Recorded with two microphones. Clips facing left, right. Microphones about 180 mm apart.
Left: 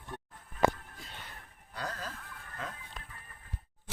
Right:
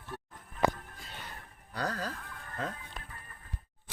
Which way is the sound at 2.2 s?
45° right (ahead or behind).